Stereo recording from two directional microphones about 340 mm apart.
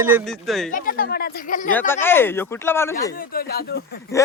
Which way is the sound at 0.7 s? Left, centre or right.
Left.